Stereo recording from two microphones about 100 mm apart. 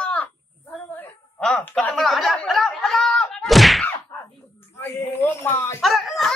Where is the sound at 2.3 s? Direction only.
Centre (ahead or behind).